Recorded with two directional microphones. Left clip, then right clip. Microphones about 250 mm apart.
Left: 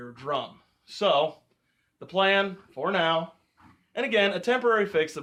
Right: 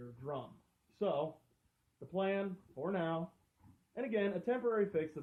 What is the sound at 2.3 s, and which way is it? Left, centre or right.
Speech, centre.